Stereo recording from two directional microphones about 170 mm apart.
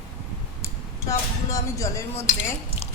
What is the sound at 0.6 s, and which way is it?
Speech, 20° left (ahead or behind).